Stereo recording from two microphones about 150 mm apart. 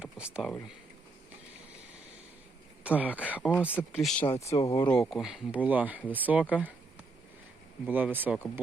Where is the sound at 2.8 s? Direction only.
10° right (ahead or behind).